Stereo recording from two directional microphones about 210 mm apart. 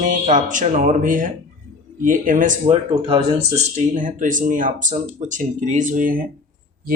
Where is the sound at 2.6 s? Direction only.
25° right (ahead or behind).